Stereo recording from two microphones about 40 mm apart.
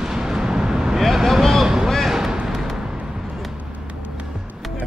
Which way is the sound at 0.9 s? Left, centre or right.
Centre.